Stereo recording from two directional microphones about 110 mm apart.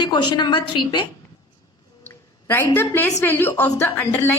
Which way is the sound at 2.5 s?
20° left (ahead or behind).